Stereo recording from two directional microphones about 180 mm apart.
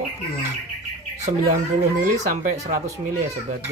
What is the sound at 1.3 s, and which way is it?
Speech, 40° right (ahead or behind).